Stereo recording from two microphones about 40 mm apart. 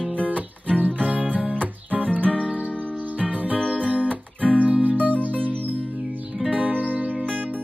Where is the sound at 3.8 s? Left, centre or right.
Right.